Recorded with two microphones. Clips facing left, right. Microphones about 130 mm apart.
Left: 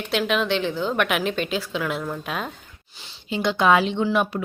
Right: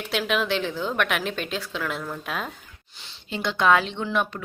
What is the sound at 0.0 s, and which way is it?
Speech, centre (ahead or behind).